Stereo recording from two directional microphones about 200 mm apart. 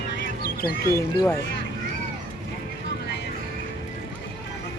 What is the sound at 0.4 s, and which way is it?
Duck, 50° left (ahead or behind).